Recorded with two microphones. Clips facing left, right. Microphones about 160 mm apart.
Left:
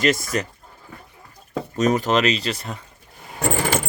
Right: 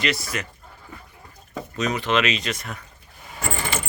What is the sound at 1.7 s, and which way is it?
Speech, 45° left (ahead or behind).